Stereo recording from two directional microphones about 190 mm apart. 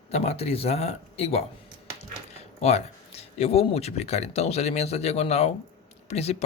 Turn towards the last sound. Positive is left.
turn(degrees=35)  # may be behind; listen again after turning